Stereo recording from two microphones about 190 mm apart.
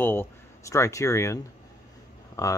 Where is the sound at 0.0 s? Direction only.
10° left (ahead or behind).